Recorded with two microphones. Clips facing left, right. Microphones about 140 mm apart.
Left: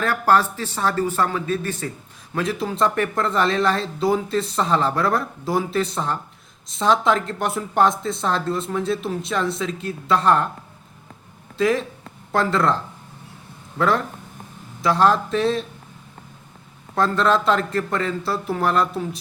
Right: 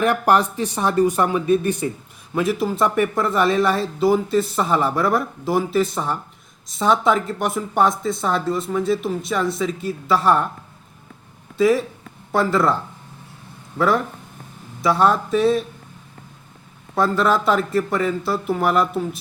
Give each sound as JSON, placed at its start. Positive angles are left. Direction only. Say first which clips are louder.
{"t": 0.0, "sound": "speech", "louder": "right 2 dB", "side_deg": -15}
{"t": 11.5, "sound": "speech", "louder": "right 3 dB", "side_deg": -5}
{"t": 16.9, "sound": "speech", "louder": "right 1 dB", "side_deg": -5}